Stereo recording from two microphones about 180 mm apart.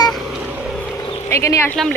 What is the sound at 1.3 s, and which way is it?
Speech, 15° left (ahead or behind).